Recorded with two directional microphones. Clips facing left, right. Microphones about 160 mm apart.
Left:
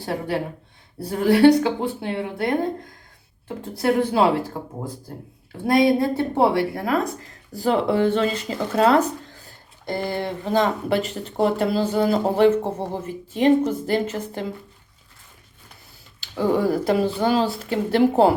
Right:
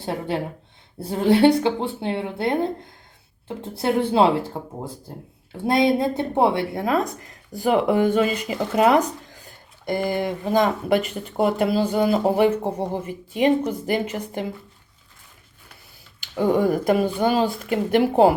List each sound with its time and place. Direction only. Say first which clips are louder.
1.1 s a woman's voice: left 1 dB; 25° right (ahead or behind)
3.8 s a woman's voice: even; 25° right (ahead or behind)
10.9 s speech: right 2 dB; 35° left (ahead or behind)
11.3 s a woman's voice: even; 10° right (ahead or behind)
16.5 s a woman's voice: right 1 dB; 15° right (ahead or behind)